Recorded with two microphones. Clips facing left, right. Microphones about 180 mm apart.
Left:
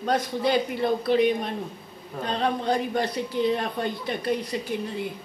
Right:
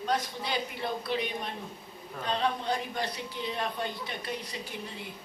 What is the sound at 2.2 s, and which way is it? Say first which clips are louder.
A man's voice: left 5 dB; 50° left (ahead or behind).